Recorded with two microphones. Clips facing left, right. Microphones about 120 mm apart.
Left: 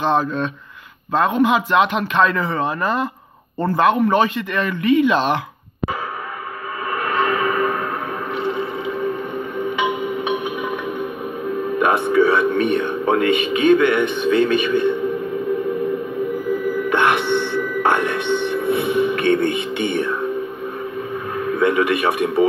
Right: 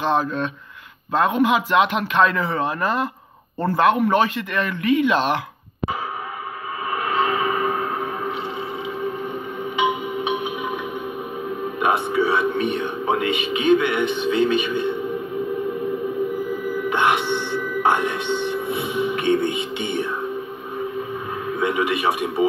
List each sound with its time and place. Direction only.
0.0 s a man's voice: 5° right (ahead or behind)
6.9 s train: 50° left (ahead or behind)
8.4 s a sound: 55° left (ahead or behind)
9.8 s music: 55° left (ahead or behind)
11.8 s a man's voice: 55° left (ahead or behind)
16.9 s music: 60° left (ahead or behind)
21.5 s a man's voice: 55° left (ahead or behind)